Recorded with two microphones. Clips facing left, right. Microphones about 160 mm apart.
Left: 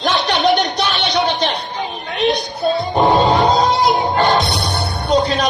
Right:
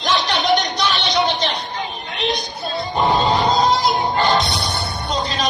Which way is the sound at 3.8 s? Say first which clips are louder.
Left 4 dB; 60° left (ahead or behind).